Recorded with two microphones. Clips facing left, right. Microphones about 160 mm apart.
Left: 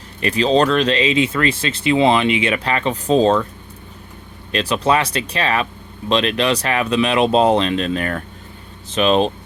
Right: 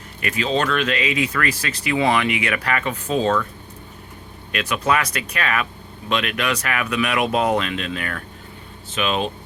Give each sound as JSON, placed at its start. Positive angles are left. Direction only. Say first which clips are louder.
{"t": 0.2, "sound": "speech", "louder": "left 7 dB", "side_deg": 30}
{"t": 4.5, "sound": "speech", "louder": "left 4 dB", "side_deg": 30}